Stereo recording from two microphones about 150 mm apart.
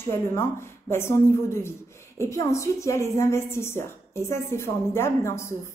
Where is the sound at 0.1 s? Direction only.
15° left (ahead or behind).